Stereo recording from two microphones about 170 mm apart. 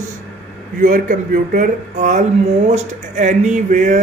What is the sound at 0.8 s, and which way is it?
Speech, 50° right (ahead or behind).